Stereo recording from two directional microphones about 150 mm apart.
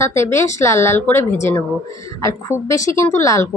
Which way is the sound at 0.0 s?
20° left (ahead or behind).